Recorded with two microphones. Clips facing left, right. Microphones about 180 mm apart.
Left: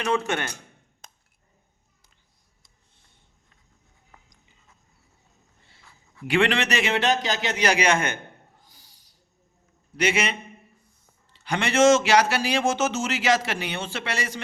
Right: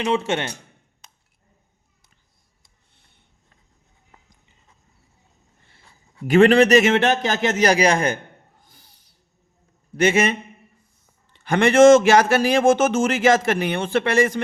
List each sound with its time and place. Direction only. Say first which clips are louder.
0.0 s a man's voice: right 3 dB; 25° right (ahead or behind)
1.0 s a sound: left 3 dB; 45° left (ahead or behind)
6.2 s a man's voice: right 10 dB; 40° right (ahead or behind)
8.6 s a sound: right 2 dB; 55° right (ahead or behind)
10.0 s a man's voice: right 6 dB; 45° right (ahead or behind)
11.3 s a man's voice: right 7 dB; 50° right (ahead or behind)